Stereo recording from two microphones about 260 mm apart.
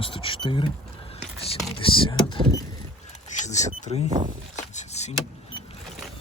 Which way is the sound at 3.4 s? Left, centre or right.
Left.